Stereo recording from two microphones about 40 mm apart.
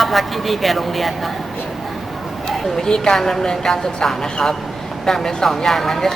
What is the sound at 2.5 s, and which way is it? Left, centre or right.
Speech, centre.